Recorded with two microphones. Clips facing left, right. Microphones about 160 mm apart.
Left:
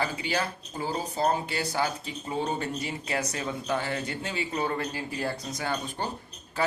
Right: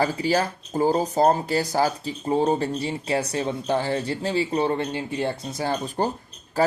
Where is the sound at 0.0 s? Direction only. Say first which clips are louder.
Right 7 dB; 40° right (ahead or behind).